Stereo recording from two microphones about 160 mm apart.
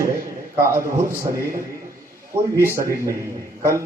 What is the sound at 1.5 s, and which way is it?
Speech, 60° right (ahead or behind).